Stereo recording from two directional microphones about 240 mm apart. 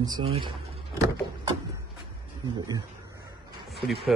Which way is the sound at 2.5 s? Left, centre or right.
Centre.